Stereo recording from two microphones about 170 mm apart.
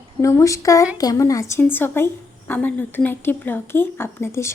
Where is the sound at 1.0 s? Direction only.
20° left (ahead or behind).